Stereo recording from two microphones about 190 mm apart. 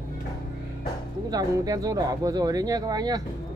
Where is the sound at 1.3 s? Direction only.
20° right (ahead or behind).